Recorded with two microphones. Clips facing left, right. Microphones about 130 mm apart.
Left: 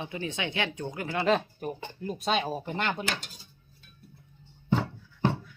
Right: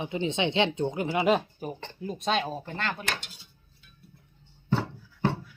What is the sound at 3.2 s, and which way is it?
Speech, 40° left (ahead or behind).